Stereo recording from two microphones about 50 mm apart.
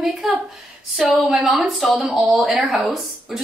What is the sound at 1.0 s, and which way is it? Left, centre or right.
Speech, centre.